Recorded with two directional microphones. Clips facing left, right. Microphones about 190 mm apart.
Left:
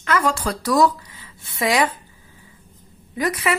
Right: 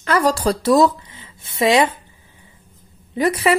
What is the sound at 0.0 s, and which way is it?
Speech, 35° right (ahead or behind).